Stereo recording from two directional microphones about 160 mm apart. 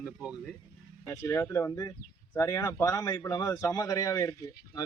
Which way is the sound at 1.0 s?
20° left (ahead or behind).